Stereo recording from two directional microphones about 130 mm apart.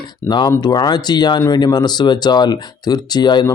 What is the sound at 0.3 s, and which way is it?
Speech, 35° left (ahead or behind).